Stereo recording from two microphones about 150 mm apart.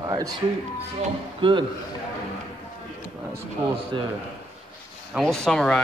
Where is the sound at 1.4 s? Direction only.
35° right (ahead or behind).